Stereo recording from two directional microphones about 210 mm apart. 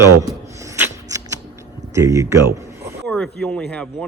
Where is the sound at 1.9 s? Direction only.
15° right (ahead or behind).